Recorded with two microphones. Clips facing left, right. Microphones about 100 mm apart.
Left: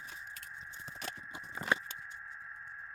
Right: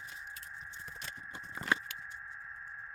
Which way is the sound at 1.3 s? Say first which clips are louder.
Left 1 dB; 15° left (ahead or behind).